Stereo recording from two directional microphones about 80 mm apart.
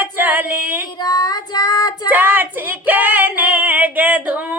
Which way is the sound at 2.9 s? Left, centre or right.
Right.